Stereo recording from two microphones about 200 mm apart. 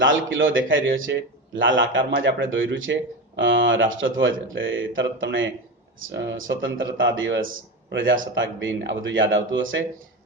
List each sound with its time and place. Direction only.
0.0 s a man's voice: 75° right (ahead or behind)